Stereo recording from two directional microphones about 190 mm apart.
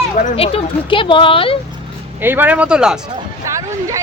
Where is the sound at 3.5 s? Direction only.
15° right (ahead or behind).